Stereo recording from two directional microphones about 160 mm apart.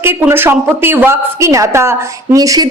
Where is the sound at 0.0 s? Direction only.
15° right (ahead or behind).